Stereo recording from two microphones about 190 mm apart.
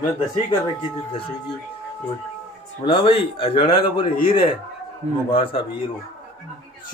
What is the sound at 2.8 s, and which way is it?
Speech, 30° left (ahead or behind).